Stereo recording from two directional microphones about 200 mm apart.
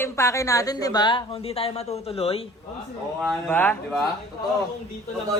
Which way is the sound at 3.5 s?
10° left (ahead or behind).